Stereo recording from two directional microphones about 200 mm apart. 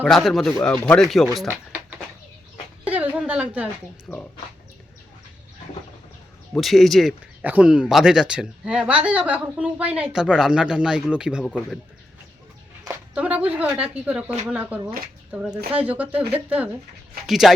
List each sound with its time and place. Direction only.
0.0 s speech: centre (ahead or behind)
1.5 s a sound: 10° right (ahead or behind)
4.1 s speech: 10° left (ahead or behind)
6.5 s speech: centre (ahead or behind)
13.1 s speech: 5° right (ahead or behind)